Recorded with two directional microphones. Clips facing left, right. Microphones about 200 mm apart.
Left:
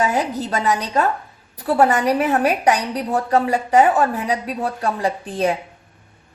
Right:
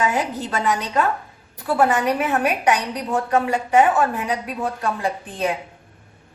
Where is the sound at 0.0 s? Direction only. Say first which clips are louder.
Left 2 dB; 40° left (ahead or behind).